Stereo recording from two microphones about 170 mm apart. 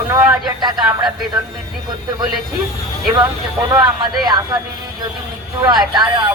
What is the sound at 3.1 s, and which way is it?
Speech, 25° right (ahead or behind).